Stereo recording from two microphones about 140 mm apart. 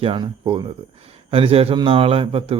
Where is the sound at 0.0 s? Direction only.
40° right (ahead or behind).